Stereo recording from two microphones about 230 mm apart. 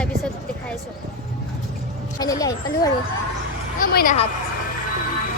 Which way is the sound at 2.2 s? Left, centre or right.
Centre.